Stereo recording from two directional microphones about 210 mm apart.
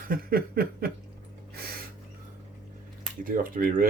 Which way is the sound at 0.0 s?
45° right (ahead or behind).